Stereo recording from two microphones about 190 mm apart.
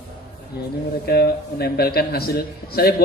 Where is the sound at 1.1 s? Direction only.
55° left (ahead or behind).